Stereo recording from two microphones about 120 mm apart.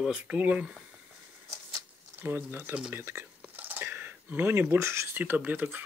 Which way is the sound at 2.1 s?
15° right (ahead or behind).